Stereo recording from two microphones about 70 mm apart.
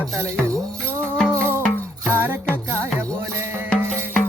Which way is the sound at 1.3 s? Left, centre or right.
Left.